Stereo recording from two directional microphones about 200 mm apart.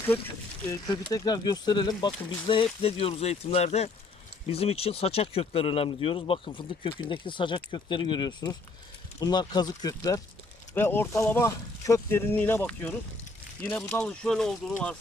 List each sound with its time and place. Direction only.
0.7 s speech: 20° left (ahead or behind)